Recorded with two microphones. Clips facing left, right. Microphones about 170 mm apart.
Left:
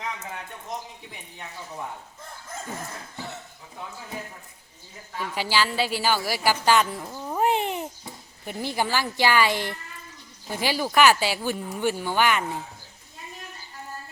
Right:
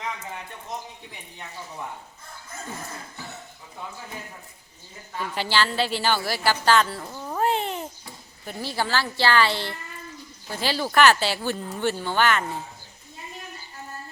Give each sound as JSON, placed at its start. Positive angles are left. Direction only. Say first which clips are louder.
{"t": 5.1, "sound": "a woman's voice", "louder": "right 1 dB", "side_deg": 10}